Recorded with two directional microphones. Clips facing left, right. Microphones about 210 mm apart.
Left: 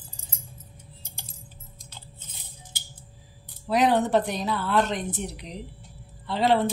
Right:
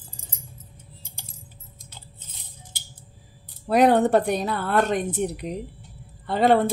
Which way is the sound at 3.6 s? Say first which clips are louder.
Right 4 dB; 55° right (ahead or behind).